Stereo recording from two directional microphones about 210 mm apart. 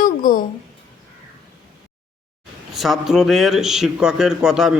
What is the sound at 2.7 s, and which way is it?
Speech, centre (ahead or behind).